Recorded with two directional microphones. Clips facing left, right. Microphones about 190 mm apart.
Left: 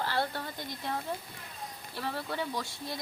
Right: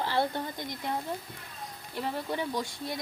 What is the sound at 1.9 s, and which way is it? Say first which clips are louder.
Speech: right 3 dB; 15° right (ahead or behind).